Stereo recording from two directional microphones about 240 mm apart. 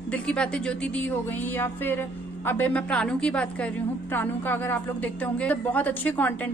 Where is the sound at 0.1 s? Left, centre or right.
Centre.